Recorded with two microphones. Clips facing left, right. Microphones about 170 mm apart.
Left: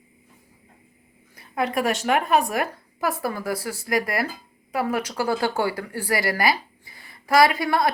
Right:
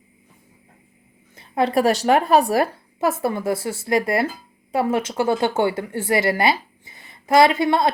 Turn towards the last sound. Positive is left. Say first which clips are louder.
# right 3 dB
turn(degrees=-25)  # may be behind; listen again after turning